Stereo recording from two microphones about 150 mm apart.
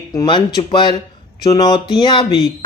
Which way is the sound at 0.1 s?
30° left (ahead or behind).